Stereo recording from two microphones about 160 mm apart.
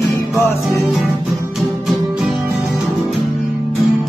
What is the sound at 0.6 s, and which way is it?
Music, centre (ahead or behind).